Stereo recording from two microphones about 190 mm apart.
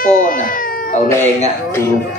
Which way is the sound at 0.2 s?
45° left (ahead or behind).